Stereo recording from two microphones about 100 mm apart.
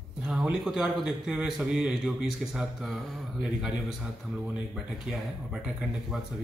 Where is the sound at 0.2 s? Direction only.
5° right (ahead or behind).